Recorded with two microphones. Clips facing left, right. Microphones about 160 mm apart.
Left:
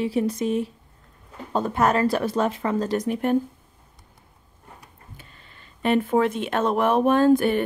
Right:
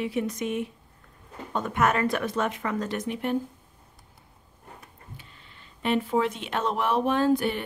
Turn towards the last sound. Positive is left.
turn(degrees=50)  # may be behind; listen again after turning